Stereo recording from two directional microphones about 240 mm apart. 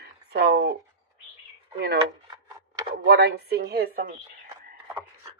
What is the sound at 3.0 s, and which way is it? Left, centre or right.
Speech, right.